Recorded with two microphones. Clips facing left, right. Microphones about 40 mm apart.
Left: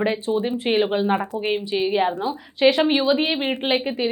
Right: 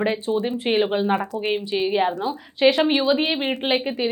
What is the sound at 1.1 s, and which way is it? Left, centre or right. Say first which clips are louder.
Speech: even; left.